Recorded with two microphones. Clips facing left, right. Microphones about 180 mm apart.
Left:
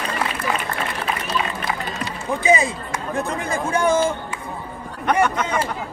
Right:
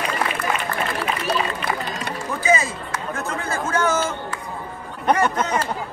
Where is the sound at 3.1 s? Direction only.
15° left (ahead or behind).